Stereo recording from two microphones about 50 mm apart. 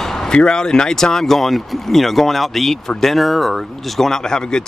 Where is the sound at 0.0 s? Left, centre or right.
Centre.